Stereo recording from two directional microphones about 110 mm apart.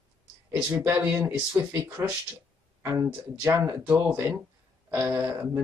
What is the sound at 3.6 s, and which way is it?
Speech, 15° right (ahead or behind).